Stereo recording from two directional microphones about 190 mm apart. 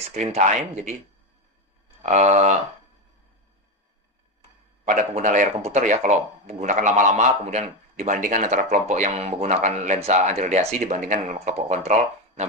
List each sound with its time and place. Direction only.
0.1 s speech: 40° right (ahead or behind)
2.0 s speech: 35° right (ahead or behind)
4.8 s speech: 45° right (ahead or behind)